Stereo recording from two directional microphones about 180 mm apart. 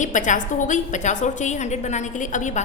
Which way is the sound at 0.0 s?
45° left (ahead or behind).